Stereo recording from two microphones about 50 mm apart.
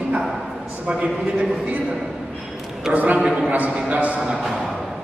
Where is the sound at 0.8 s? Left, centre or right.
Right.